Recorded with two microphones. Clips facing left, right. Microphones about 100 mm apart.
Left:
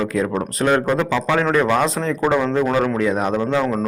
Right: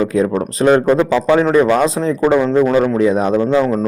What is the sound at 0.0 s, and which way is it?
A man's voice, 25° right (ahead or behind).